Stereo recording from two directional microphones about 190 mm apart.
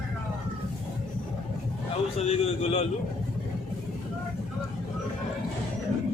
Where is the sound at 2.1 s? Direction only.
35° left (ahead or behind).